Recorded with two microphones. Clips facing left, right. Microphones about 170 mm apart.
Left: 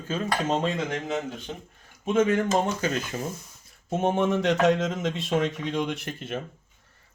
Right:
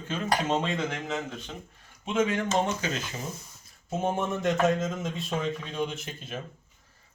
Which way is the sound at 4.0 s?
80° left.